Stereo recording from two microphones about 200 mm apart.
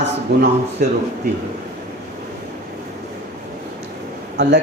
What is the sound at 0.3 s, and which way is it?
Speech, 55° right (ahead or behind).